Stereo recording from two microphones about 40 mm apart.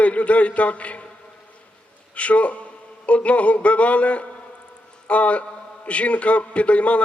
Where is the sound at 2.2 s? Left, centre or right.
Left.